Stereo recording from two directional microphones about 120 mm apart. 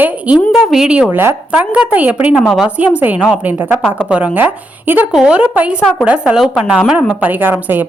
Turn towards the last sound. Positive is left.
turn(degrees=-15)  # may be behind; listen again after turning